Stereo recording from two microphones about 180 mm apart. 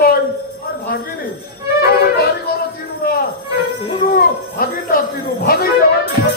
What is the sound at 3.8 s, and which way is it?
Speech, 30° left (ahead or behind).